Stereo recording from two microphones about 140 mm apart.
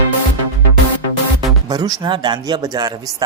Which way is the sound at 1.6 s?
25° right (ahead or behind).